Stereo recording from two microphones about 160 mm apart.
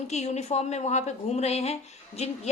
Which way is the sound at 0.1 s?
45° left (ahead or behind).